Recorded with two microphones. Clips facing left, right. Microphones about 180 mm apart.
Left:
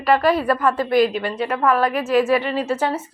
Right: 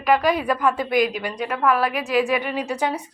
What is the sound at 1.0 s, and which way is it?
A woman's voice, 15° right (ahead or behind).